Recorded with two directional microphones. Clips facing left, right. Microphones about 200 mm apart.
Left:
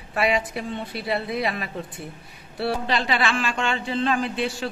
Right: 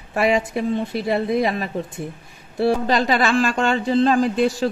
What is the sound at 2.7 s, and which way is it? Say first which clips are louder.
Speech: right 6 dB; 40° right (ahead or behind).